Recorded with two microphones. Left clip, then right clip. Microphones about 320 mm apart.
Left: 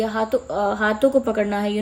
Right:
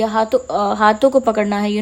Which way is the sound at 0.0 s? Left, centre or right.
Right.